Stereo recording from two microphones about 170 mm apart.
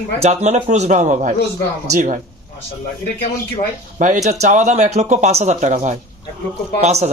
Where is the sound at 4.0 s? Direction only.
45° right (ahead or behind).